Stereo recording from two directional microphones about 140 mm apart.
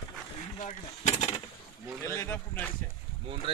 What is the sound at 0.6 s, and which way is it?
Speech, 50° left (ahead or behind).